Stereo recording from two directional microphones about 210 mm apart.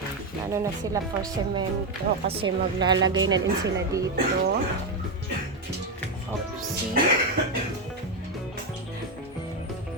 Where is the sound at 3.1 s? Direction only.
65° right (ahead or behind).